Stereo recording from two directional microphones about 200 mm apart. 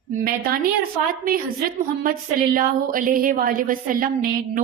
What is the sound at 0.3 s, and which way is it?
A woman's voice, 50° right (ahead or behind).